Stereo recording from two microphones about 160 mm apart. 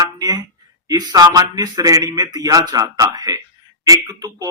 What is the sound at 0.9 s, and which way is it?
Speech, 25° right (ahead or behind).